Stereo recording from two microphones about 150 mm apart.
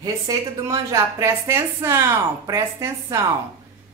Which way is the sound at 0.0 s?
25° right (ahead or behind).